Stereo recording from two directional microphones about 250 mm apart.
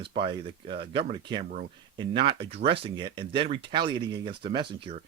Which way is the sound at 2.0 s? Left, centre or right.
Centre.